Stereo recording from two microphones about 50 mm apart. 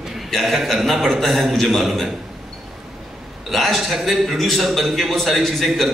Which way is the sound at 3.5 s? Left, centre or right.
Centre.